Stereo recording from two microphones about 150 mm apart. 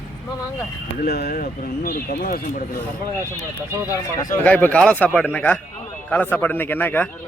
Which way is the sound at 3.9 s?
20° left (ahead or behind).